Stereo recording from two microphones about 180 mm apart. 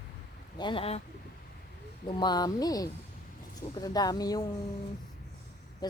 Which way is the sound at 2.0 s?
25° left (ahead or behind).